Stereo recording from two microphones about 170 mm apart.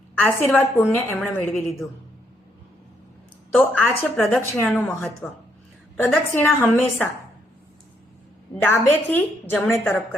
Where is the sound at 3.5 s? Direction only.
10° left (ahead or behind).